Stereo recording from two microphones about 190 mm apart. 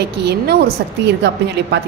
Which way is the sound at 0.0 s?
60° right (ahead or behind).